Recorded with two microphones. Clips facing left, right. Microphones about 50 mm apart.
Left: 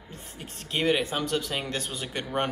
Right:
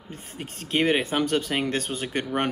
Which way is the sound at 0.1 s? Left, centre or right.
Right.